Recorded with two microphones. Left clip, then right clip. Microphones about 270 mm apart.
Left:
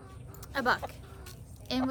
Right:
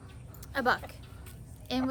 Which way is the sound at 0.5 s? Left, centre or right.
Centre.